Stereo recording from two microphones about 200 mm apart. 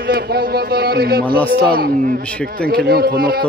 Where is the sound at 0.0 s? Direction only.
50° right (ahead or behind).